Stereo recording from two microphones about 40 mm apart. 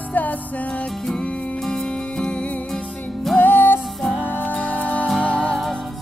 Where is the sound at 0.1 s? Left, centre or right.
Left.